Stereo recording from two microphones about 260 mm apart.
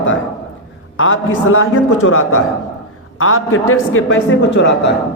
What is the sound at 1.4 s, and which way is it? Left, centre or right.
A man's voice, left.